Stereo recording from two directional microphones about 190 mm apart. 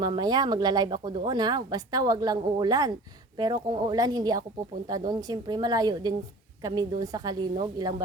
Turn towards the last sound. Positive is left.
turn(degrees=-20)  # may be behind; listen again after turning